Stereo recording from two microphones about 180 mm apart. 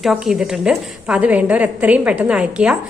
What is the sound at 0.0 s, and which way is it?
A woman's voice, centre (ahead or behind).